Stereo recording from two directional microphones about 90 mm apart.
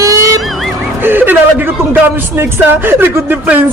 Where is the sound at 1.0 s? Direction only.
20° right (ahead or behind).